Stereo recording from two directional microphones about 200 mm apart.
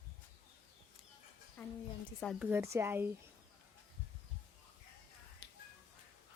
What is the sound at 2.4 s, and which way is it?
Speech, 10° right (ahead or behind).